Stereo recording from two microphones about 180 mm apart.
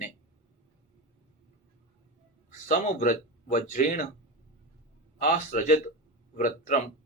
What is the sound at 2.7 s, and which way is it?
Speech, 45° left (ahead or behind).